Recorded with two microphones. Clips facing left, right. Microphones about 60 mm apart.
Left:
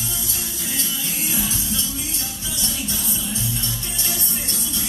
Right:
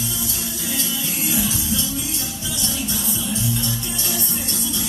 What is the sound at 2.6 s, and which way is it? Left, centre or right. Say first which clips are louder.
Music: right 2 dB; right.